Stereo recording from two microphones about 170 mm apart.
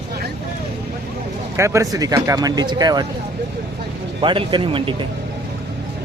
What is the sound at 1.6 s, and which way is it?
Speech, 15° right (ahead or behind).